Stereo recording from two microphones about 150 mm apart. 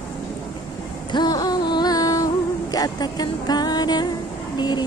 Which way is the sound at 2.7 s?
25° left (ahead or behind).